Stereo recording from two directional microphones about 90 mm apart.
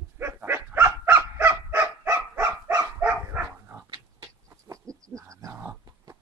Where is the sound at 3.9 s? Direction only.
40° right (ahead or behind).